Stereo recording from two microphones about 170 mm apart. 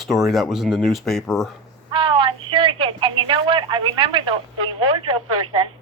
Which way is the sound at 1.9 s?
30° right (ahead or behind).